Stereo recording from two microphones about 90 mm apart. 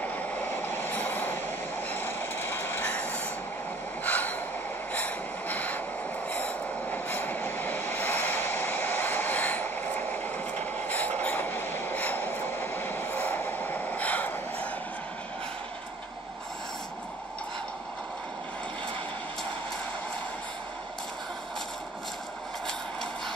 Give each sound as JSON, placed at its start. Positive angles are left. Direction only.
{"t": 0.0, "sound": "vehicle", "side_deg": 20}
{"t": 1.9, "sound": "train", "side_deg": 25}
{"t": 4.0, "sound": "snort", "side_deg": 20}
{"t": 4.9, "sound": "a sound", "side_deg": 15}
{"t": 6.3, "sound": "train", "side_deg": 20}